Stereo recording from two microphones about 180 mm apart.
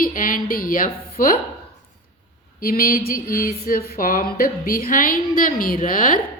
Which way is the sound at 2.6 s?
50° left (ahead or behind).